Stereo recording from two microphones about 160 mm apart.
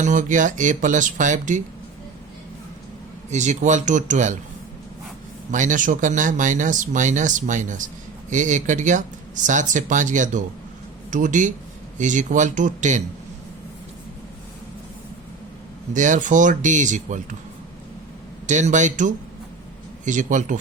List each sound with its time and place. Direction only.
0.0 s speech: 50° right (ahead or behind)
3.2 s speech: 45° right (ahead or behind)
5.5 s speech: 50° right (ahead or behind)
15.9 s speech: 50° right (ahead or behind)
18.4 s speech: 50° right (ahead or behind)